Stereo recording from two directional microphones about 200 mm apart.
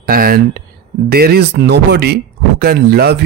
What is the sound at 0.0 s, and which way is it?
A man's voice, 50° right (ahead or behind).